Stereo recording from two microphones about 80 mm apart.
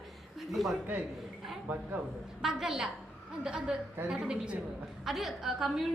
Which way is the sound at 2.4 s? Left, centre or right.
Centre.